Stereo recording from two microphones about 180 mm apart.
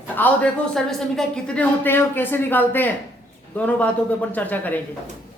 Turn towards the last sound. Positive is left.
turn(degrees=10)  # may be behind; listen again after turning